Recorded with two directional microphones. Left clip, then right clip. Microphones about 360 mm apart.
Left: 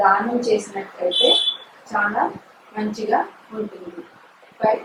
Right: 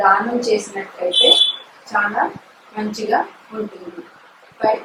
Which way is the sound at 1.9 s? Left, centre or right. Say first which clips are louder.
Right 2 dB; centre.